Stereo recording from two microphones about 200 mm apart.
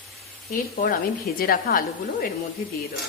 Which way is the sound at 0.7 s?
45° left (ahead or behind).